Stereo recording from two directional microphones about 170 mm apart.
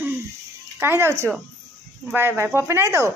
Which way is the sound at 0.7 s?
15° right (ahead or behind).